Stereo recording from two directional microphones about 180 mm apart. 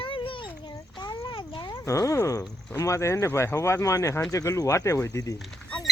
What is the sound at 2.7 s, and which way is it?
Speech, 15° left (ahead or behind).